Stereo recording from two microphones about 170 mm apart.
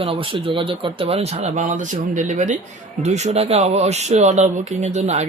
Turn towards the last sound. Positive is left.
turn(degrees=-40)  # may be behind; listen again after turning